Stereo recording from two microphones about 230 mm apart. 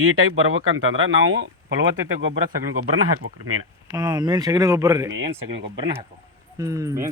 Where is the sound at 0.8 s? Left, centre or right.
Right.